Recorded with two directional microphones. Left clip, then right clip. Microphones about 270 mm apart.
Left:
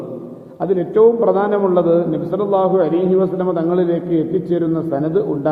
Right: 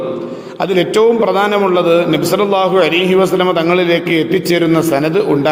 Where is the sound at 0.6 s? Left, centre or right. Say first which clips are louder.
Right 2 dB; right.